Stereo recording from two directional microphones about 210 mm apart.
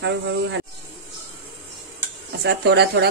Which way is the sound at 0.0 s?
60° right (ahead or behind).